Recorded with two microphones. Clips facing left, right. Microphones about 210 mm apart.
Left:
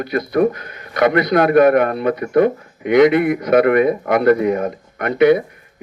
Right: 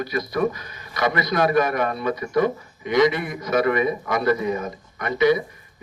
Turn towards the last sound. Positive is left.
turn(degrees=60)  # may be behind; listen again after turning